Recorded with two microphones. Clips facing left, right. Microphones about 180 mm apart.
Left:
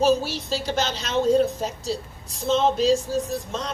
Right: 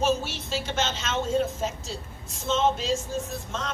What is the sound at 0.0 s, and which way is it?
Speech, 35° left (ahead or behind).